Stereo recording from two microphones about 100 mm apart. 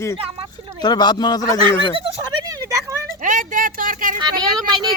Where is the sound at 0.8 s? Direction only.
45° left (ahead or behind).